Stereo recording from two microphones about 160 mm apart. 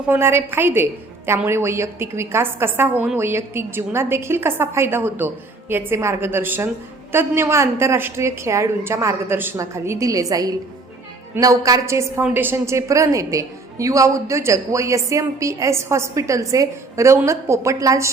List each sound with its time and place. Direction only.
0.1 s a woman's voice: 15° right (ahead or behind)